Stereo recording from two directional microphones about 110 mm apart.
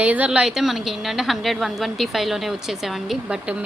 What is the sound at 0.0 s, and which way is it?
A woman's voice, 10° right (ahead or behind).